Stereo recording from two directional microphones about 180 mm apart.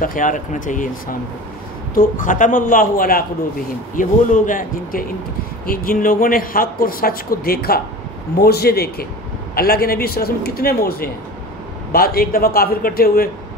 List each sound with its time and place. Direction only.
0.0 s speech: 50° left (ahead or behind)
2.0 s a man's voice: 45° left (ahead or behind)